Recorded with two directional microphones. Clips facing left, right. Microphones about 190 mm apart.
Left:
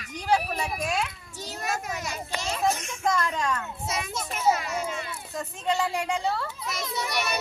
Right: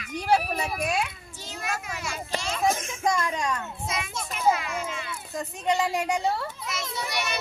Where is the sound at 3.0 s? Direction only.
15° right (ahead or behind).